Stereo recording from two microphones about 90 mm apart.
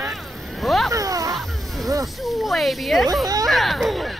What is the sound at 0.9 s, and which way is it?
Speech, 40° right (ahead or behind).